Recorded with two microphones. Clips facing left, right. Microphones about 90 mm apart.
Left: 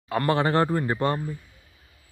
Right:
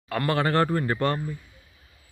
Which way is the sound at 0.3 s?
20° left (ahead or behind).